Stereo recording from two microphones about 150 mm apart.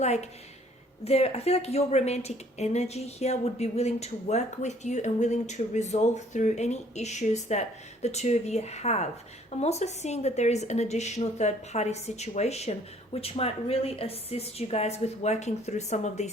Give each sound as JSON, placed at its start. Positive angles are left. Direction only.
{"t": 0.0, "sound": "speech", "side_deg": 45}